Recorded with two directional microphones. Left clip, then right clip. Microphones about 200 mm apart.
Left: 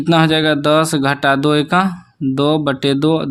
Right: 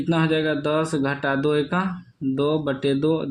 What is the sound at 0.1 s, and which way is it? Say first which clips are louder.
Speech: left 9 dB; 45° left (ahead or behind).